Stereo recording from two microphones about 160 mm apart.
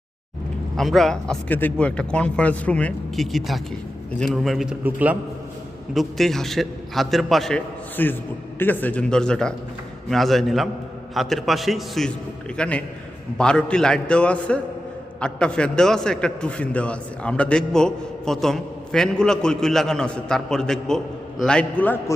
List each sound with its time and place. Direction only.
0.8 s a man's voice: centre (ahead or behind)
5.9 s a man's voice: centre (ahead or behind)